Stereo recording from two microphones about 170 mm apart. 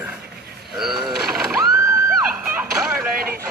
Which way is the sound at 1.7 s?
15° right (ahead or behind).